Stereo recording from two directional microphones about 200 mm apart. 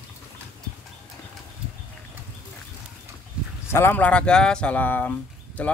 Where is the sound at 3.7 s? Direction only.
10° left (ahead or behind).